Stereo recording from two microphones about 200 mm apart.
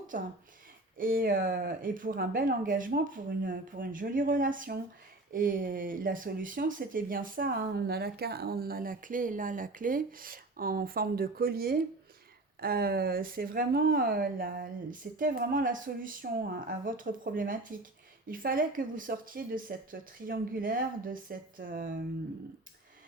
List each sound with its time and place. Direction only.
0.1 s a woman's voice: 40° right (ahead or behind)